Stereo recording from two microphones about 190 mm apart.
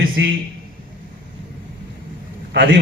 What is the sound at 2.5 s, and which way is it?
Speech, 65° right (ahead or behind).